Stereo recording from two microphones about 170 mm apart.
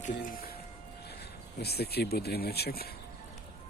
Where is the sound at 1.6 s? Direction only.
70° left (ahead or behind).